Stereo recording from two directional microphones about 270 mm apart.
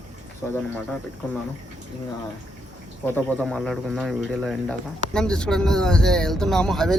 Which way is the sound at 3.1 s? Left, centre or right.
Centre.